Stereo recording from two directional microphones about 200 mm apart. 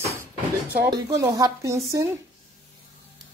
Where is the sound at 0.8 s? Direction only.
15° right (ahead or behind).